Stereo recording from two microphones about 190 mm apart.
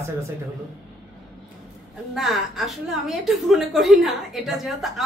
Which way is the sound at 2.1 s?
Centre (ahead or behind).